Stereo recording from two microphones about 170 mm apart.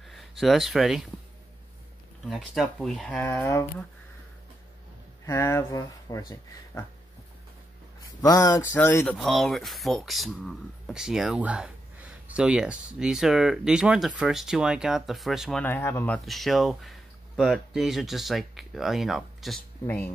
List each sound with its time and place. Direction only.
0.0 s a sound: centre (ahead or behind)
0.4 s speech: centre (ahead or behind)
2.2 s speech: centre (ahead or behind); by 3.6 s 15° left (ahead or behind)
5.2 s speech: 15° left (ahead or behind)
8.2 s speech: 20° left (ahead or behind)
9.1 s speech: centre (ahead or behind)
15.6 s speech: 15° left (ahead or behind)
16.3 s speech: centre (ahead or behind)